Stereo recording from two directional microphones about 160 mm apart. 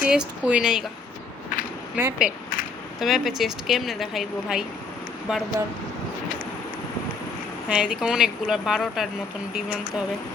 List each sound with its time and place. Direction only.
0.0 s speech: 5° right (ahead or behind)
2.0 s speech: 10° right (ahead or behind)
7.7 s speech: 5° right (ahead or behind)